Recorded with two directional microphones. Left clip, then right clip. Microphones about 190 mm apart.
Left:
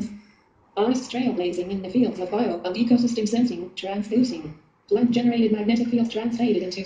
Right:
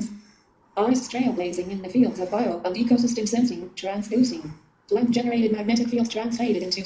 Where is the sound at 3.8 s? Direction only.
50° left (ahead or behind).